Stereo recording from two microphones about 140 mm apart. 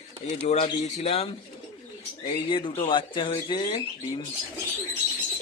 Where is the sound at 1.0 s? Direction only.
45° left (ahead or behind).